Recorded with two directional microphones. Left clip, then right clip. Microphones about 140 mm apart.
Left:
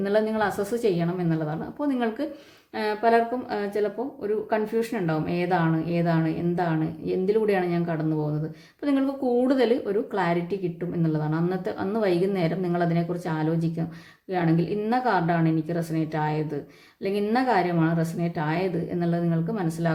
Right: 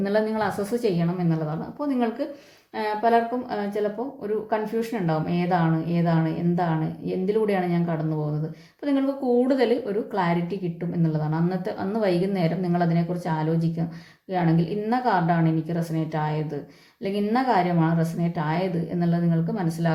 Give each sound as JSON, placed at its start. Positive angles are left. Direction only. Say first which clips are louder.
{"t": 0.0, "sound": "a woman's voice", "louder": "even", "side_deg": 15}